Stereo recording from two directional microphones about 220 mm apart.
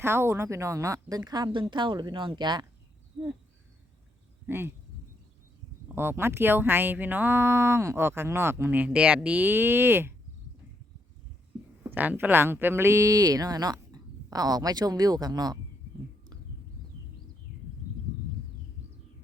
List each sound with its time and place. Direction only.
0.0 s speech: 10° right (ahead or behind)
4.4 s speech: 10° right (ahead or behind)
5.9 s speech: 10° right (ahead or behind)
11.8 s speech: 10° right (ahead or behind)